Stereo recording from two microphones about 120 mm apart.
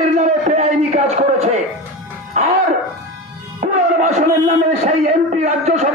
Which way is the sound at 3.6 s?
80° right.